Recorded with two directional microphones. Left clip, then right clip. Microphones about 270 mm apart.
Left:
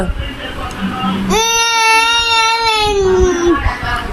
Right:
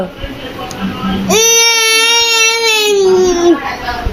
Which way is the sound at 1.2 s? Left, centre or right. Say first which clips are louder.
Right 5 dB; centre.